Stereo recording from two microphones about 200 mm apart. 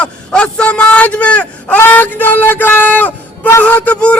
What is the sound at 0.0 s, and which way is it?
Speech, 5° left (ahead or behind).